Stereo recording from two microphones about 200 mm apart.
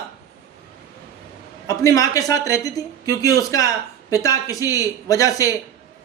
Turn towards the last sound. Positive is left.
turn(degrees=15)  # may be behind; listen again after turning